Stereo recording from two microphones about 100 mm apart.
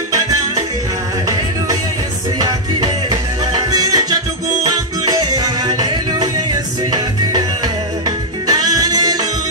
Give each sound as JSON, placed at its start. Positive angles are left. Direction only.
{"t": 2.3, "sound": "music", "side_deg": -40}